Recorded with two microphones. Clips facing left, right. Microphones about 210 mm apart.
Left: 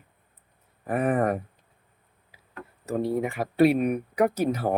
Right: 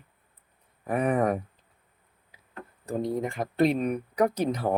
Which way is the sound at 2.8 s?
10° left (ahead or behind).